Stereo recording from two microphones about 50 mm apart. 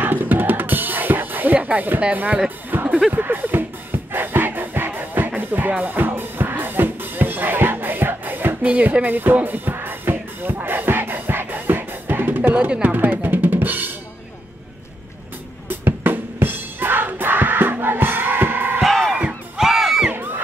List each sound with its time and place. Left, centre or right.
0.0 s drum kit: right
2.7 s music: right
8.6 s music: right
12.8 s drum: right
15.7 s music: right
18.9 s music: centre
19.5 s music: centre